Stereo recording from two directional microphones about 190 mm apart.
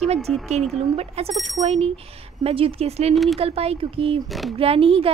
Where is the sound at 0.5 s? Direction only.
35° right (ahead or behind).